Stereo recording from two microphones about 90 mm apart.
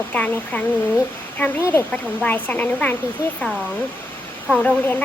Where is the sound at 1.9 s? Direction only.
15° left (ahead or behind).